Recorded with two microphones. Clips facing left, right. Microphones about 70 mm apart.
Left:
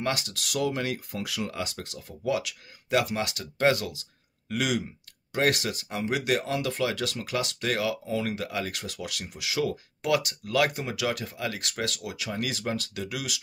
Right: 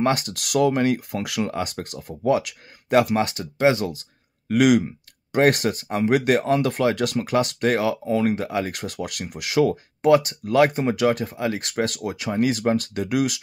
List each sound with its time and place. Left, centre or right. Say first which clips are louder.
0.0 s speech: right 8 dB; right
0.7 s speech: right 10 dB; right
1.1 s speech: right 7 dB; right
1.4 s speech: right 9 dB; right
3.9 s a sound: right 8 dB; right
5.4 s speech: right 7 dB; right
8.7 s speech: right 6 dB; right
10.0 s speech: right 9 dB; right